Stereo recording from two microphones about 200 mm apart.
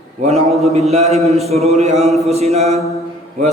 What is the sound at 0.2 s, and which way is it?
Mantra, 35° right (ahead or behind).